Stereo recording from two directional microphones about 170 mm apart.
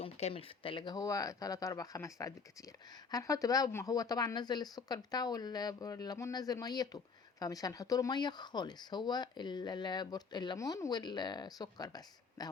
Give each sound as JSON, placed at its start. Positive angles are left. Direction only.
{"t": 0.0, "sound": "speech", "side_deg": 35}